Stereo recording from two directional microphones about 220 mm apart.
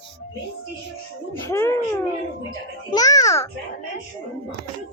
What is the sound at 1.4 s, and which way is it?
A child's voice, 10° left (ahead or behind).